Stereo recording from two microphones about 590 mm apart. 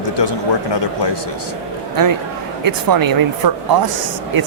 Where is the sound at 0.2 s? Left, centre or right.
Left.